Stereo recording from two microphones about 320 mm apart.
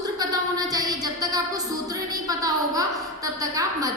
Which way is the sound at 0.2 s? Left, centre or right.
Centre.